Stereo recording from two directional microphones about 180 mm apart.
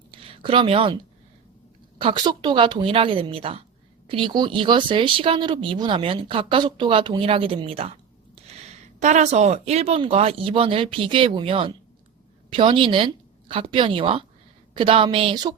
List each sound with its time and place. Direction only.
0.1 s speech: 30° right (ahead or behind)
2.0 s a woman's voice: 25° right (ahead or behind)